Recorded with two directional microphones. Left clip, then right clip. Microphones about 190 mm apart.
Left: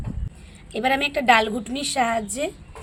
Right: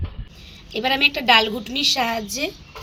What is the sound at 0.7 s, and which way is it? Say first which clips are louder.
A woman's voice: right 3 dB; 10° left (ahead or behind).